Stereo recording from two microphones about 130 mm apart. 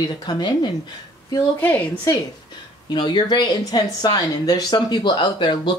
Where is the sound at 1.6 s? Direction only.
10° left (ahead or behind).